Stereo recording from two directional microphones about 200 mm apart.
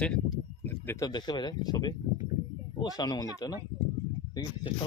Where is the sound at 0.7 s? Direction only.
15° left (ahead or behind).